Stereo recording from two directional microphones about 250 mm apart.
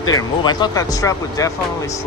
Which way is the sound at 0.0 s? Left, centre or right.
Centre.